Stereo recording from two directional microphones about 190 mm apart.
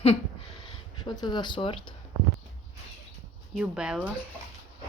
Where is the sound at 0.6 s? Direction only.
25° left (ahead or behind).